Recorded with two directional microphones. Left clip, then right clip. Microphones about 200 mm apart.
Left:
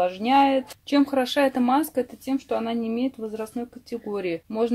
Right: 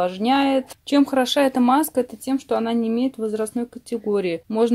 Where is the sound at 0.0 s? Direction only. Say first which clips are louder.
Even; 40° right (ahead or behind).